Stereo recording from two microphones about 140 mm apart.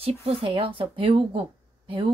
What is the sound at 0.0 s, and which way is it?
Speech, 40° right (ahead or behind).